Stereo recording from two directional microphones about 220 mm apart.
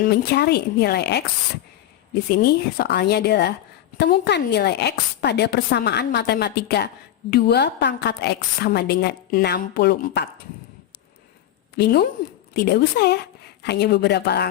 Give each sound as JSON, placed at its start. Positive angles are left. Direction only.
{"t": 0.0, "sound": "a woman's voice", "side_deg": 45}
{"t": 2.3, "sound": "a woman's voice", "side_deg": 45}
{"t": 11.8, "sound": "a woman's voice", "side_deg": 45}